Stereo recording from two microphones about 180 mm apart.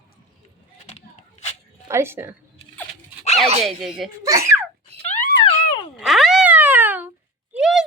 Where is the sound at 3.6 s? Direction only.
Centre (ahead or behind).